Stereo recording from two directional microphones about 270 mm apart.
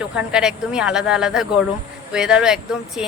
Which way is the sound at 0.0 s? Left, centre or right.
Centre.